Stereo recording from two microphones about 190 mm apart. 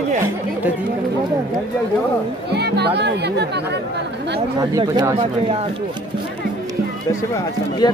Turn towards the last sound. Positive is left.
turn(degrees=20)  # may be behind; listen again after turning